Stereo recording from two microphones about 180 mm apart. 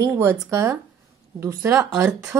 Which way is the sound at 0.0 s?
15° right (ahead or behind).